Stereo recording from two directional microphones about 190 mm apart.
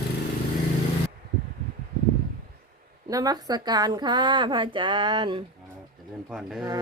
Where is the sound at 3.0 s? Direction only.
20° right (ahead or behind).